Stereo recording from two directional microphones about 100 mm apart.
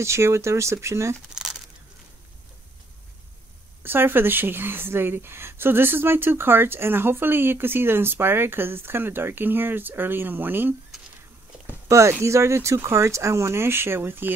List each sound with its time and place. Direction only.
0.0 s speech: 30° right (ahead or behind)
3.8 s speech: 20° right (ahead or behind)
11.9 s speech: 30° right (ahead or behind)